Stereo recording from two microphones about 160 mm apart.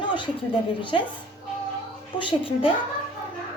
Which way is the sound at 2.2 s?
35° left (ahead or behind).